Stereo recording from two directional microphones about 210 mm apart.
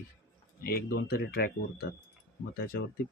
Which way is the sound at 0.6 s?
45° left (ahead or behind).